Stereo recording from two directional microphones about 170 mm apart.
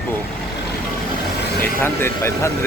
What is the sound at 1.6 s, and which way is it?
Speech, 15° left (ahead or behind).